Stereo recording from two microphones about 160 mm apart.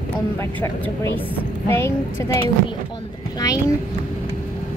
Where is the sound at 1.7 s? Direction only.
15° left (ahead or behind).